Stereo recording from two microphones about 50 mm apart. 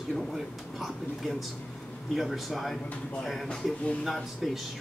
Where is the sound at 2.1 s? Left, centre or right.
Centre.